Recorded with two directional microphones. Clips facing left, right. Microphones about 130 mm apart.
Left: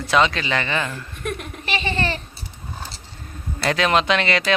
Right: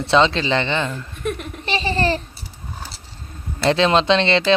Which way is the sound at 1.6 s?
30° right (ahead or behind).